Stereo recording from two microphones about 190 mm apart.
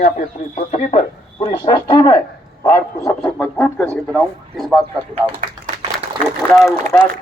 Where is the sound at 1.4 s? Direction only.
20° left (ahead or behind); by 4.8 s centre (ahead or behind).